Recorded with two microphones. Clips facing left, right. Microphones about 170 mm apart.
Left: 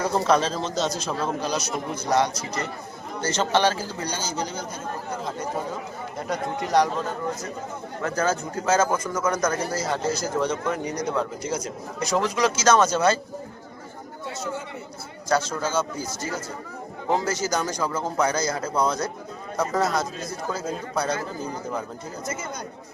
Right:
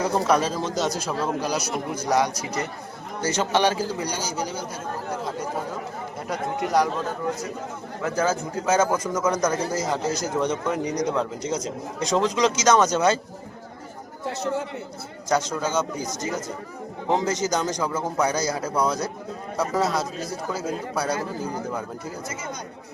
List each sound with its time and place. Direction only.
0.0 s speech: 15° right (ahead or behind)
6.2 s a man's voice: 5° right (ahead or behind)
8.0 s speech: 10° right (ahead or behind)
15.3 s speech: 15° right (ahead or behind)